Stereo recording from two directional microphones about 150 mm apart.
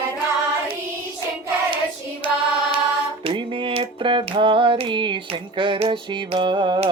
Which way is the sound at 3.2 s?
35° right (ahead or behind).